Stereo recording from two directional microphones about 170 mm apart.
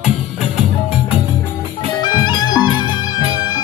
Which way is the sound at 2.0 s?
25° left (ahead or behind).